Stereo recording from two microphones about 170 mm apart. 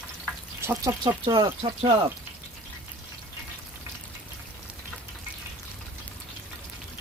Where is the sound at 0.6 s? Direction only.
15° right (ahead or behind).